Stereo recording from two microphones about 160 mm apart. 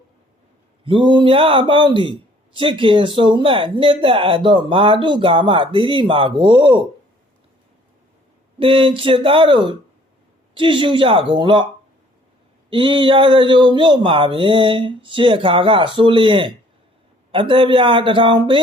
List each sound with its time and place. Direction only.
0.9 s a man's voice: 30° right (ahead or behind)
8.5 s a man's voice: 35° right (ahead or behind)
12.7 s a man's voice: 30° right (ahead or behind)